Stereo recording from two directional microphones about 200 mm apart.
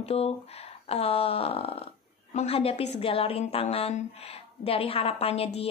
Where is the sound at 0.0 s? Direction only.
30° left (ahead or behind).